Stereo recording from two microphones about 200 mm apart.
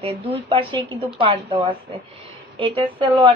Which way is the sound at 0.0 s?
25° right (ahead or behind).